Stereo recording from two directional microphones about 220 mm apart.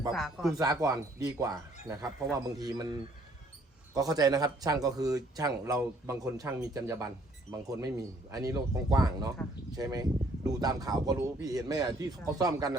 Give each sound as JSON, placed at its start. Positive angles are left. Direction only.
{"t": 0.1, "sound": "speech", "side_deg": 0}
{"t": 0.6, "sound": "speech", "side_deg": -15}